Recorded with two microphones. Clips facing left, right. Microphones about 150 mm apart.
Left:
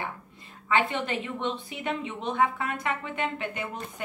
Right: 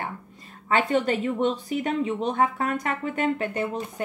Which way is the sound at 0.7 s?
40° right (ahead or behind).